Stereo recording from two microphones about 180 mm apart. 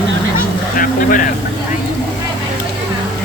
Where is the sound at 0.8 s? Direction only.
50° left (ahead or behind).